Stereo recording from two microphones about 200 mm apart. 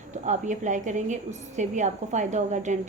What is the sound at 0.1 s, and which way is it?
A woman's voice, 35° right (ahead or behind).